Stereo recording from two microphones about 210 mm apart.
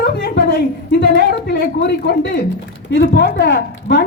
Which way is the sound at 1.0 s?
50° left (ahead or behind).